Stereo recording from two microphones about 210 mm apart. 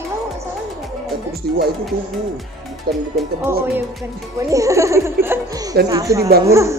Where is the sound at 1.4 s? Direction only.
50° right (ahead or behind).